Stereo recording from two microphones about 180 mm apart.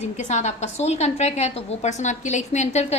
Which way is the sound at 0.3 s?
40° left (ahead or behind).